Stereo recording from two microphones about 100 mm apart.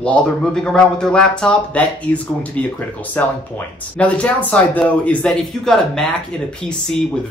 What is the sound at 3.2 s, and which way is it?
Speech, 15° left (ahead or behind).